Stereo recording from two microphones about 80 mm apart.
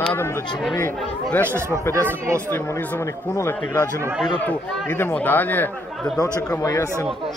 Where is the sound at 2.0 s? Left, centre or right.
Right.